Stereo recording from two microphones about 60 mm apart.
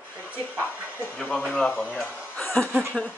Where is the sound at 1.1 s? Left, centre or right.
Centre.